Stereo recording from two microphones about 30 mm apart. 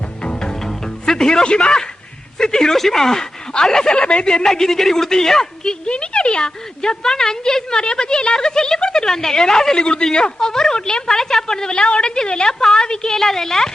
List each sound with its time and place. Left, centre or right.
0.2 s music: left
2.4 s a woman's voice: left
2.7 s a man's voice: centre
3.9 s a woman's voice: left
4.4 s a man's voice: centre
5.8 s a woman's voice: left
7.0 s a woman's voice: centre
9.7 s a woman's voice: left